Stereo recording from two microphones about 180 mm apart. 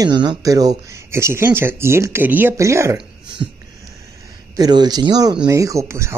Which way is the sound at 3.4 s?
30° right (ahead or behind).